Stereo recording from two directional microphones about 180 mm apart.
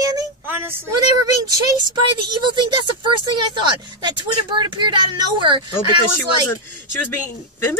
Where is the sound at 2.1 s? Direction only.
25° right (ahead or behind).